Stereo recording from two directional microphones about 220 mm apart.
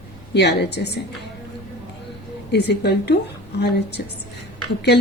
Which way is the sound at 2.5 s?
50° left (ahead or behind).